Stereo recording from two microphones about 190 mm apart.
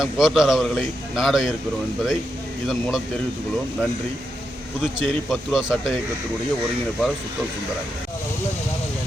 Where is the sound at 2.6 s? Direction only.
Centre (ahead or behind).